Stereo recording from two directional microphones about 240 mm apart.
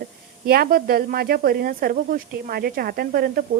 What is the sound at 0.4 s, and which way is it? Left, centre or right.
A woman's voice, right.